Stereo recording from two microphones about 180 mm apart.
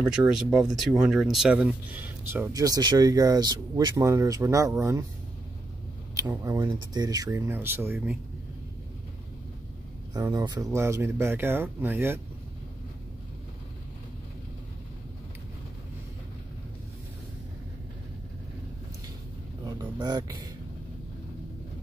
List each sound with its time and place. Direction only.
0.0 s speech: 5° right (ahead or behind)
6.1 s speech: 15° right (ahead or behind)
10.1 s speech: 20° right (ahead or behind)
19.8 s speech: 25° right (ahead or behind)